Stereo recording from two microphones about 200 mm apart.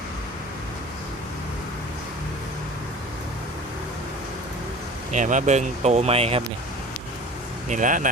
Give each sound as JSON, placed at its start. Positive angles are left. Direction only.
{"t": 5.1, "sound": "speech", "side_deg": -40}
{"t": 7.7, "sound": "speech", "side_deg": -40}